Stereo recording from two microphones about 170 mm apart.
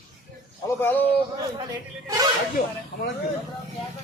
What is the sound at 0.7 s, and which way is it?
Speech, 10° left (ahead or behind).